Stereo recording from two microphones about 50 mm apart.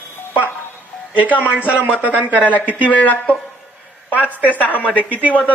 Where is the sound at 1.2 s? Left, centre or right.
Right.